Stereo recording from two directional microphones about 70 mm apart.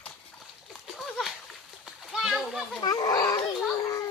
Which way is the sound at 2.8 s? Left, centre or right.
Left.